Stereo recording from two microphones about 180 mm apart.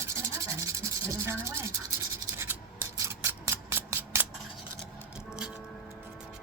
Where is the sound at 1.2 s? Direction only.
15° right (ahead or behind).